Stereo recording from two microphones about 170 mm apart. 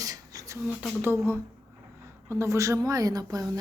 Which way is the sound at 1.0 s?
15° right (ahead or behind).